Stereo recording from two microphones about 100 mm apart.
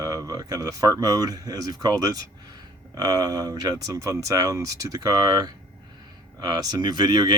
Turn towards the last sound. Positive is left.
turn(degrees=-45)  # may be behind; listen again after turning